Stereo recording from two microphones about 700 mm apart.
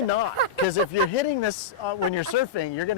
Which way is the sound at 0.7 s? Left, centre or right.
Left.